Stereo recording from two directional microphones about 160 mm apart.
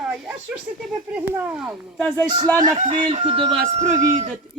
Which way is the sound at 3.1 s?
35° right (ahead or behind).